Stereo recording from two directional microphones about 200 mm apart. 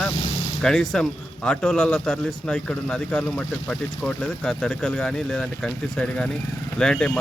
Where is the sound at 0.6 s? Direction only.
5° left (ahead or behind).